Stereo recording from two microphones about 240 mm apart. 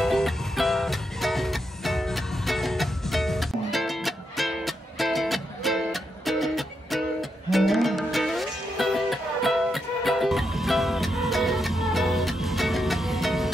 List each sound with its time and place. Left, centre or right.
0.0 s music: centre